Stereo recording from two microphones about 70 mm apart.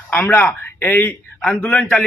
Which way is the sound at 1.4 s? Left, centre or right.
Centre.